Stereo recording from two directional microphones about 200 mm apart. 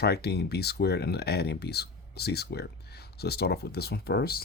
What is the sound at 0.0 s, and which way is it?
Speech, 55° left (ahead or behind).